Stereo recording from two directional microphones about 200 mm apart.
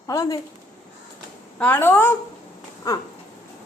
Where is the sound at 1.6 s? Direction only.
10° left (ahead or behind).